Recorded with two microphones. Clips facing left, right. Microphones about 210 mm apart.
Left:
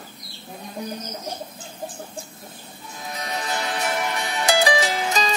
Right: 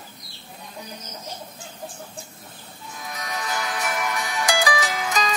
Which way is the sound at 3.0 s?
30° left (ahead or behind).